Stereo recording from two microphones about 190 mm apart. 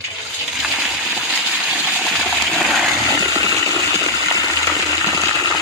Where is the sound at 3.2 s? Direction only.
20° right (ahead or behind).